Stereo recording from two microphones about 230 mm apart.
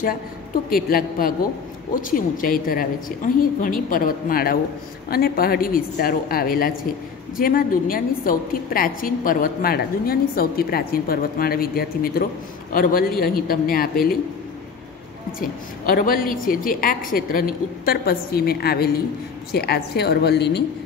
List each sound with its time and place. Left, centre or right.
0.7 s a woman's voice: left
15.9 s a woman's voice: left